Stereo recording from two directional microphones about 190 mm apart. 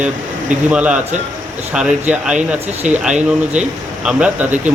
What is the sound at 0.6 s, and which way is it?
A man's voice, 5° right (ahead or behind).